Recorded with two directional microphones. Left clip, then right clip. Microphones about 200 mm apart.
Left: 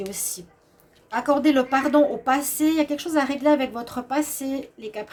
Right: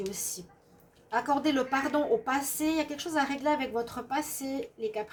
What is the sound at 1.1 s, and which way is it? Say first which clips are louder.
A woman's voice: left 7 dB; 50° left (ahead or behind).